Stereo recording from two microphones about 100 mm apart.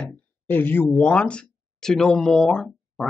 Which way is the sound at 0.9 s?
10° left (ahead or behind).